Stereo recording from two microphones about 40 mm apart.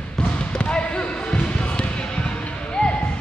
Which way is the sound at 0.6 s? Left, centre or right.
Left.